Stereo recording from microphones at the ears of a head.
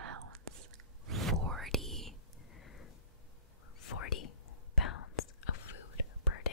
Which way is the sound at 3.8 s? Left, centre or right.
Left.